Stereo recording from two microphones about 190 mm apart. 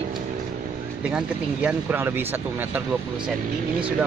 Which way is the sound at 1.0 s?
5° right (ahead or behind).